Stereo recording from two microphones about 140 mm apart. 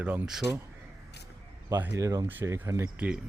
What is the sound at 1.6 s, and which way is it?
Speech, 20° right (ahead or behind).